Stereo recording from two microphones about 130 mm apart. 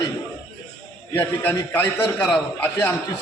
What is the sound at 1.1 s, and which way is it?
A man's voice, 15° left (ahead or behind).